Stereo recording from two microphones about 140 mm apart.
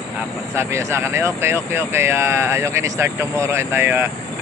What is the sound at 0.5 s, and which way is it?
Speech, 20° right (ahead or behind).